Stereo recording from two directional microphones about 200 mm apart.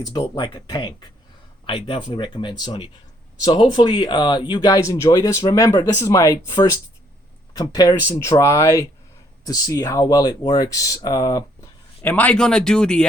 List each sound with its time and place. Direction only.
0.1 s speech: 25° left (ahead or behind)
12.0 s speech: 10° left (ahead or behind)